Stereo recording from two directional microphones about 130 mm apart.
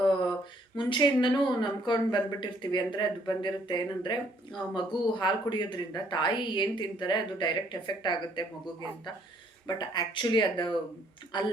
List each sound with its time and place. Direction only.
0.8 s speech: 35° left (ahead or behind)